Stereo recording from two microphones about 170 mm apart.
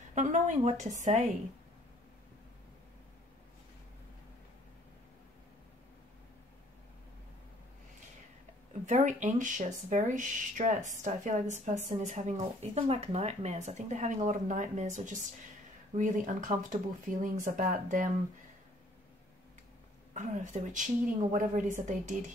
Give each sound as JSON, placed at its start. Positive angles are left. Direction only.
{"t": 0.1, "sound": "speech", "side_deg": -45}
{"t": 8.8, "sound": "speech", "side_deg": -45}
{"t": 20.2, "sound": "speech", "side_deg": -45}